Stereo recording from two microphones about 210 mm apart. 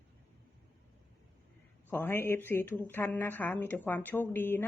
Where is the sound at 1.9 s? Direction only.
10° left (ahead or behind).